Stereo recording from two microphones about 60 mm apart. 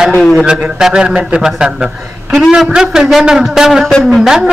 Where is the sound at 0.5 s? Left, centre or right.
Centre.